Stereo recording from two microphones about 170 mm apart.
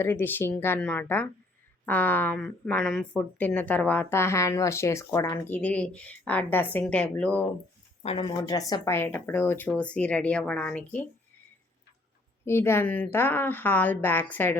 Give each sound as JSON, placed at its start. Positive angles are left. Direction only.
{"t": 0.0, "sound": "speech", "side_deg": 10}
{"t": 5.5, "sound": "speech", "side_deg": 10}
{"t": 8.0, "sound": "speech", "side_deg": 30}
{"t": 8.4, "sound": "speech", "side_deg": 20}
{"t": 12.5, "sound": "speech", "side_deg": 15}